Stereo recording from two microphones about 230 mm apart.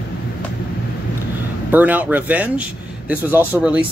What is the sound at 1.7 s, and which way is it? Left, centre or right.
Speech, centre.